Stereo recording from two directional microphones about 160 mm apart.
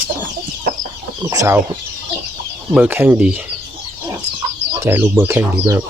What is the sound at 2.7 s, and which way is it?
Speech, 10° right (ahead or behind).